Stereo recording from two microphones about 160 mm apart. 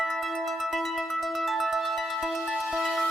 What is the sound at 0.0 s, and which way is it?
Music, centre (ahead or behind).